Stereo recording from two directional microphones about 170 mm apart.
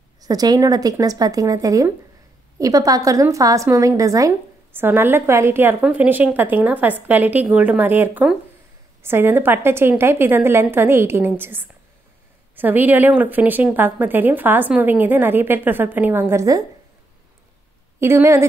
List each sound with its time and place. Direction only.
0.2 s a woman's voice: 20° right (ahead or behind)
18.0 s a woman's voice: 15° right (ahead or behind)